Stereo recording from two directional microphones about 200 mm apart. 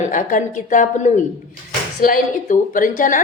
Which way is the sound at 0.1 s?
40° left (ahead or behind).